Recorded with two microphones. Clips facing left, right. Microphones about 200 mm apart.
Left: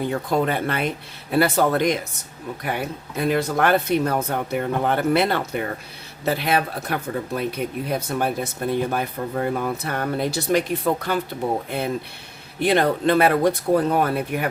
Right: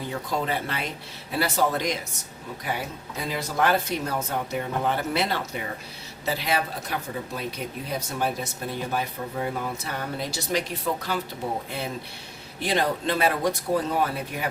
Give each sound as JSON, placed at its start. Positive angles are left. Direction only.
{"t": 0.0, "sound": "speech", "side_deg": 55}